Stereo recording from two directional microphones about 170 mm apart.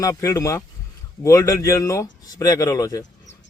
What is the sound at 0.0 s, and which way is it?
Speech, 15° left (ahead or behind).